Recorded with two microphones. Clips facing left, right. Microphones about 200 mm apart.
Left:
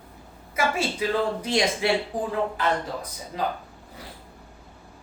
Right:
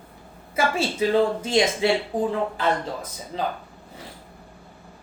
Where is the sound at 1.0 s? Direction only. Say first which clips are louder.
Right 6 dB; 30° right (ahead or behind).